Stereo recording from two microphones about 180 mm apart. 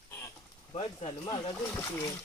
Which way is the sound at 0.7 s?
30° left (ahead or behind).